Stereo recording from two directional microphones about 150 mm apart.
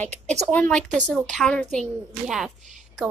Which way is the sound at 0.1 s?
50° right (ahead or behind).